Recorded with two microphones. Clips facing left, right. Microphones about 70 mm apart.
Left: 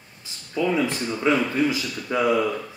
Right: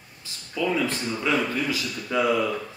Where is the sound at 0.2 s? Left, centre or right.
Left.